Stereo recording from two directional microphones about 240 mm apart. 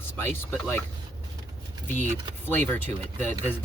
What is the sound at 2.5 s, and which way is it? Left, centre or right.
Speech, centre.